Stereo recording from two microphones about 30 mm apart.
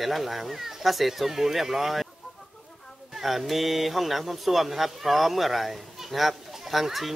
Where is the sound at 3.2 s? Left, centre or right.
Centre.